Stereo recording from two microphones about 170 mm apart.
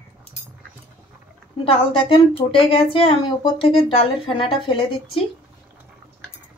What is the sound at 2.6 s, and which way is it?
Speech, 30° left (ahead or behind).